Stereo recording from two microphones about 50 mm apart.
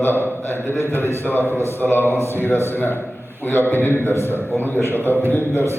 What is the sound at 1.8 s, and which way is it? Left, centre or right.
A man's voice, left.